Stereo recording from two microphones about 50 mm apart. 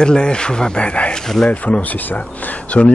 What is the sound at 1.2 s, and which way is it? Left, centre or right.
Speech, centre.